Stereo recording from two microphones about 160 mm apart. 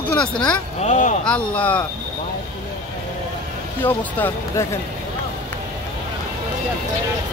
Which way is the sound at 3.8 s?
10° left (ahead or behind).